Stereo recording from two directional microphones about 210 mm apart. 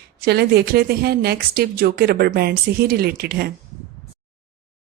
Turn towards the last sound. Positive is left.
turn(degrees=-45)  # may be behind; listen again after turning